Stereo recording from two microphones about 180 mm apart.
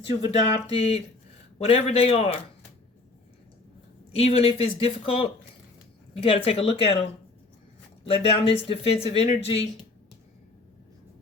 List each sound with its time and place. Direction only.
0.3 s speech: 35° left (ahead or behind)
4.1 s speech: 35° left (ahead or behind)
8.0 s speech: 30° left (ahead or behind)